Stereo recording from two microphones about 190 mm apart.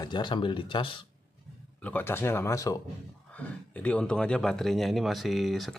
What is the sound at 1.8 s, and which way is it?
Speech, 10° left (ahead or behind).